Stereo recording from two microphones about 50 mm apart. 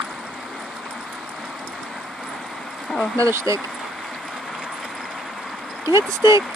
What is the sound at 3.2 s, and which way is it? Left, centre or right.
Speech, right.